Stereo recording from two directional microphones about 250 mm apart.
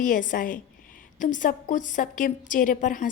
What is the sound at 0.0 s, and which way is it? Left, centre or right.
A woman's voice, left.